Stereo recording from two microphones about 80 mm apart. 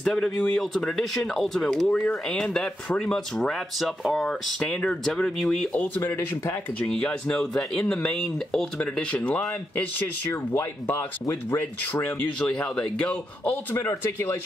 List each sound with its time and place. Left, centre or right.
0.0 s speech: centre; by 6.6 s left
6.8 s speech: centre
13.4 s speech: left